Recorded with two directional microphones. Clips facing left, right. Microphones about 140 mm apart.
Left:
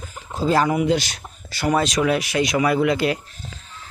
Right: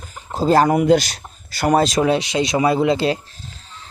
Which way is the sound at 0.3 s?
40° right (ahead or behind).